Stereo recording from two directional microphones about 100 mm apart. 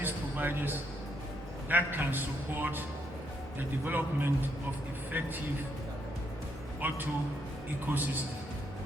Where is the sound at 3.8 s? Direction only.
20° right (ahead or behind).